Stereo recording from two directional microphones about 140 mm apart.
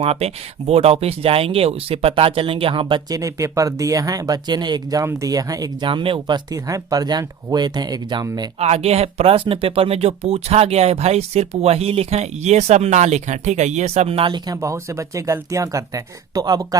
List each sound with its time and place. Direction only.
0.0 s speech: 45° right (ahead or behind)
3.1 s speech: 25° right (ahead or behind)
8.5 s speech: 50° right (ahead or behind); by 16.6 s 25° right (ahead or behind)